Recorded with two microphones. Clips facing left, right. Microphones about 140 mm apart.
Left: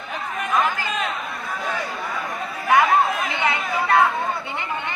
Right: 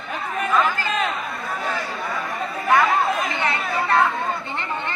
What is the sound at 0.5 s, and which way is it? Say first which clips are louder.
Chatter: right 1 dB; 15° left (ahead or behind).